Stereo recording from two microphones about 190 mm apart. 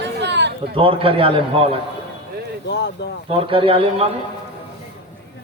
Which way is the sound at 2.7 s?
65° left (ahead or behind).